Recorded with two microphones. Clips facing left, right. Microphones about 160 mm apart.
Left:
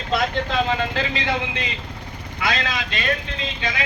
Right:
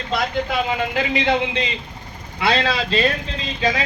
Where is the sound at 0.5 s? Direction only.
15° right (ahead or behind).